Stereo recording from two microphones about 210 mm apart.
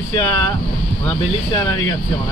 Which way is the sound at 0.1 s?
20° left (ahead or behind).